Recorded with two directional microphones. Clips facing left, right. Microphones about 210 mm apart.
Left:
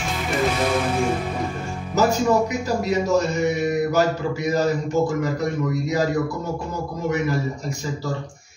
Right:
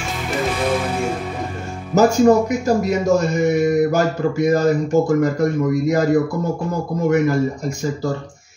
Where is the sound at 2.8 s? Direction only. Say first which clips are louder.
Right 3 dB; 45° right (ahead or behind).